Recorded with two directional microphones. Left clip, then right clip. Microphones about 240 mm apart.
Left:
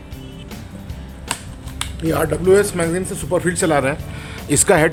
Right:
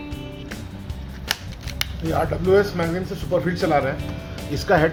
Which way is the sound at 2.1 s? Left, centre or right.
Left.